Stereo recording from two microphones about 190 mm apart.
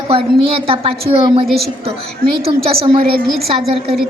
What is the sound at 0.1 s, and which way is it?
Child singing, 30° right (ahead or behind).